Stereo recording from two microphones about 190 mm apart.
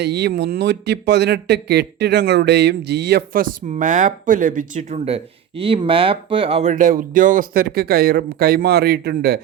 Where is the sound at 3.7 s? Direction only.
40° right (ahead or behind).